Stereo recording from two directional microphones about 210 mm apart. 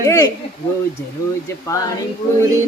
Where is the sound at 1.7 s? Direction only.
15° left (ahead or behind).